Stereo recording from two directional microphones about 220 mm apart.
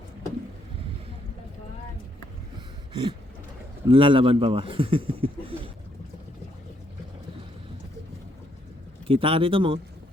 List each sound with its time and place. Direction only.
2.9 s a sound: 20° right (ahead or behind)
3.8 s speech: 25° right (ahead or behind)
9.0 s speech: 25° right (ahead or behind)